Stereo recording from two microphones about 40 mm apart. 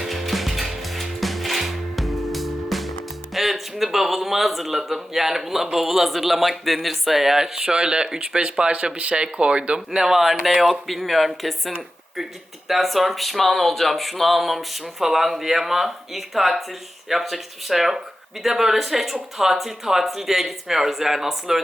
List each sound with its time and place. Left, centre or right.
0.0 s music: centre
3.3 s speech: centre; by 10.1 s right
10.1 s speech: centre